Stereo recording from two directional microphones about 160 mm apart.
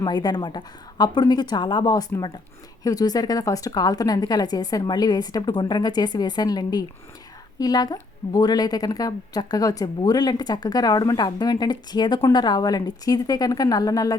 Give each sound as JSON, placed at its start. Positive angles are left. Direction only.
{"t": 0.0, "sound": "a woman's voice", "side_deg": 25}